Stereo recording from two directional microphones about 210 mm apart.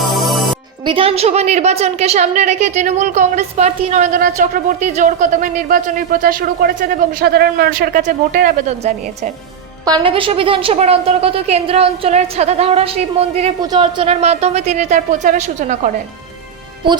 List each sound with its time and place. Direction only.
0.1 s music: centre (ahead or behind)
0.9 s a woman's voice: 25° right (ahead or behind)
9.8 s a woman's voice: 20° right (ahead or behind); by 15.8 s 35° right (ahead or behind)